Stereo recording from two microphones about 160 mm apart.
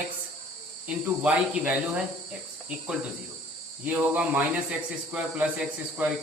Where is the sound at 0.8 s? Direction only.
5° right (ahead or behind).